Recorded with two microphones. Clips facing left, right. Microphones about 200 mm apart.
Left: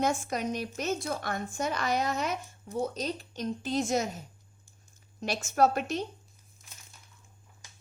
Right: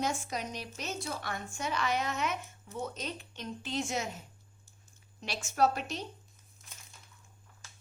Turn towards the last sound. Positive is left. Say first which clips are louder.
# left 4 dB
turn(degrees=50)  # may be behind; listen again after turning